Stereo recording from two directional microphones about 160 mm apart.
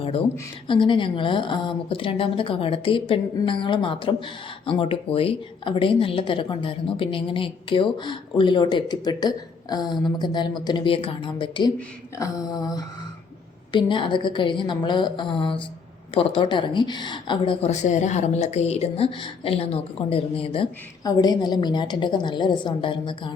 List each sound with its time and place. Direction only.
0.0 s a sound: 35° left (ahead or behind)
0.7 s speech: 30° left (ahead or behind)
17.7 s speech: 45° left (ahead or behind)
21.0 s speech: 25° left (ahead or behind)